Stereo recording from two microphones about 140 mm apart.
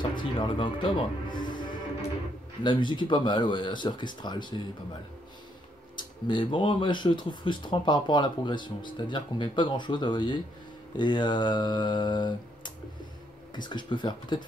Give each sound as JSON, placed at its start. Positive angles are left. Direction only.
{"t": 0.2, "sound": "speech", "side_deg": 35}
{"t": 5.9, "sound": "speech", "side_deg": 35}